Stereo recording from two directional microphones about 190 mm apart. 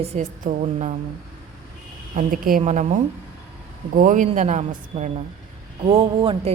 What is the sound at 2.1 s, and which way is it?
A woman's voice, 45° right (ahead or behind).